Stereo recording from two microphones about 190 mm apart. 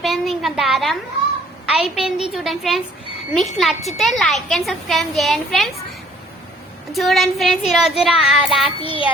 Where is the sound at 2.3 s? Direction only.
Centre (ahead or behind).